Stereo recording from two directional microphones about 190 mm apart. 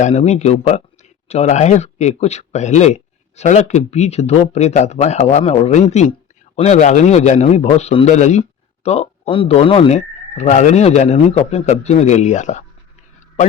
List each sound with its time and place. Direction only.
0.0 s speech: 35° left (ahead or behind)